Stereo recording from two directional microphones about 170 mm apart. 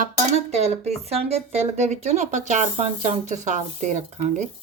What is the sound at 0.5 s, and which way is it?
Speech, 40° right (ahead or behind).